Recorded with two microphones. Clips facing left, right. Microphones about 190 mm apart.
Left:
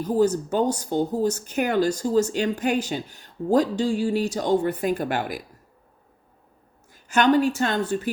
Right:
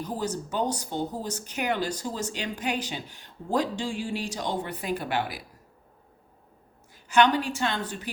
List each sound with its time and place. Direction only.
0.0 s speech: 45° left (ahead or behind)
6.9 s speech: 45° left (ahead or behind)